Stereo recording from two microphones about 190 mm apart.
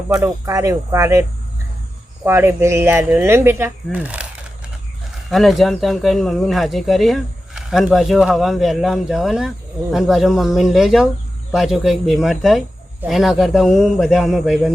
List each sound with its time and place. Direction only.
0.1 s speech: 20° right (ahead or behind)
2.2 s speech: 10° right (ahead or behind)
5.3 s speech: centre (ahead or behind)